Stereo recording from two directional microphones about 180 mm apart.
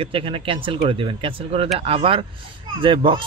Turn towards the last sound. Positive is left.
turn(degrees=-30)  # may be behind; listen again after turning